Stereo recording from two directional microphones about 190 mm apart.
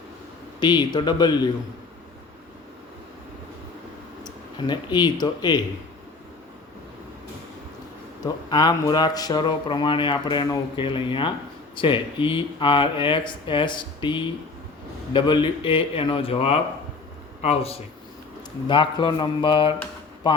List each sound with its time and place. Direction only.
0.6 s speech: 20° left (ahead or behind)
4.2 s speech: 25° left (ahead or behind)
8.2 s a man's voice: 20° left (ahead or behind)